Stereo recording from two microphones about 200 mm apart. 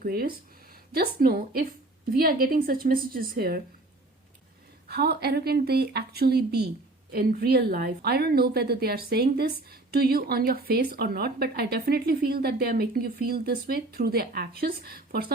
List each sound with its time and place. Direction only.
0.0 s a woman's voice: 50° right (ahead or behind)
4.9 s a woman's voice: 55° right (ahead or behind)